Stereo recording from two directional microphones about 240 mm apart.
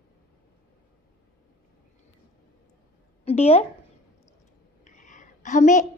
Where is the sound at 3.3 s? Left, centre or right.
Left.